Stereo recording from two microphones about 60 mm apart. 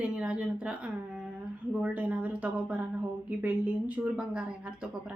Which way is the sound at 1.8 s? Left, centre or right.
Right.